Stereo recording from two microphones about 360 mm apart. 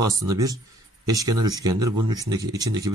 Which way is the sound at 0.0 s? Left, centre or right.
Centre.